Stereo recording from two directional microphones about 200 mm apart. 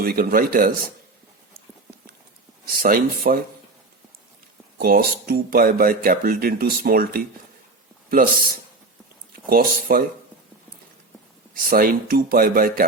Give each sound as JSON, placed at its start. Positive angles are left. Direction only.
{"t": 0.0, "sound": "speech", "side_deg": -45}
{"t": 2.6, "sound": "speech", "side_deg": -45}
{"t": 4.8, "sound": "speech", "side_deg": -45}
{"t": 11.5, "sound": "speech", "side_deg": -45}